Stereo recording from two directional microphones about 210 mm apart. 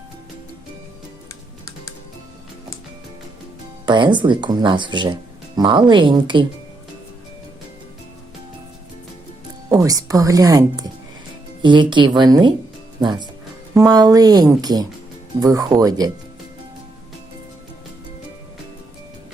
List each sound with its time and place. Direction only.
3.8 s speech: 20° right (ahead or behind)
9.6 s speech: 15° right (ahead or behind)